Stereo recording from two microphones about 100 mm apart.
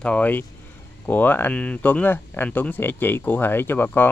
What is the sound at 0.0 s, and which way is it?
Speech, 15° left (ahead or behind).